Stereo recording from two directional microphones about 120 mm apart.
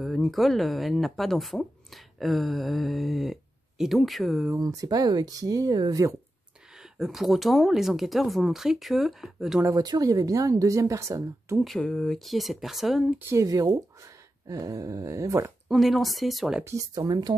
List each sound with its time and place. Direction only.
0.0 s speech: centre (ahead or behind)
4.6 s speech: 30° right (ahead or behind)
6.7 s speech: 5° right (ahead or behind)
9.8 s speech: 30° right (ahead or behind)
11.6 s speech: 5° left (ahead or behind)
13.3 s speech: 30° right (ahead or behind)
15.7 s speech: centre (ahead or behind)
16.6 s speech: 25° right (ahead or behind)